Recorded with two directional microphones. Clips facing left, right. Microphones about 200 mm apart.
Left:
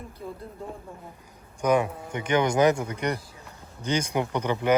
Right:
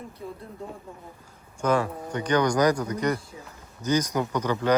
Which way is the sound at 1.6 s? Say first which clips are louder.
Left 1 dB; 20° left (ahead or behind).